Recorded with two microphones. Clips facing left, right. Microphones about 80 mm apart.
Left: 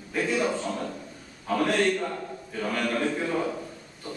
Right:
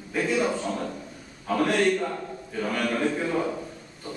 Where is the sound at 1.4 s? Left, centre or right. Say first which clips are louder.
Right 1 dB; centre.